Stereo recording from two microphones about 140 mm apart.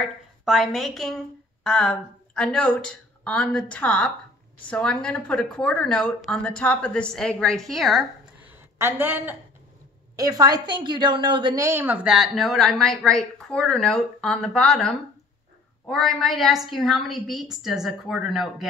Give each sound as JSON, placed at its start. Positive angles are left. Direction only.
{"t": 0.0, "sound": "a woman's voice", "side_deg": 0}
{"t": 10.1, "sound": "a woman's voice", "side_deg": -25}
{"t": 11.6, "sound": "speech", "side_deg": -15}